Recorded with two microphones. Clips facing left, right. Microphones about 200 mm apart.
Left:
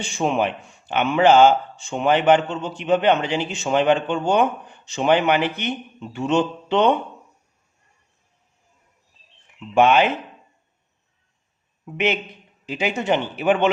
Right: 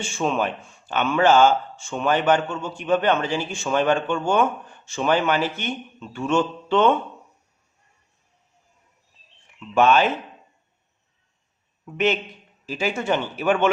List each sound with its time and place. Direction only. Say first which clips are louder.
0.0 s a man's voice: left 2 dB; 15° left (ahead or behind)
9.6 s a man's voice: left 2 dB; 20° left (ahead or behind)
11.9 s a man's voice: right 1 dB; 15° left (ahead or behind)